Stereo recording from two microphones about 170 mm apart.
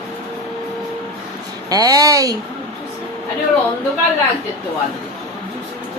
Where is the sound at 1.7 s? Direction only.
20° right (ahead or behind).